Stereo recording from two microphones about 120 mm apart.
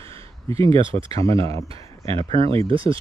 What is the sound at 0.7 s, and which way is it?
Speech, 50° right (ahead or behind).